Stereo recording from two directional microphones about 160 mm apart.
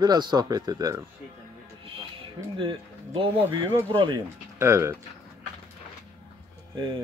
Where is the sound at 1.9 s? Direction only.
35° right (ahead or behind).